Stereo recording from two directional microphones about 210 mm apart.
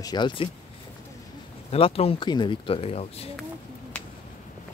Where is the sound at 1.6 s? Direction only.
25° left (ahead or behind).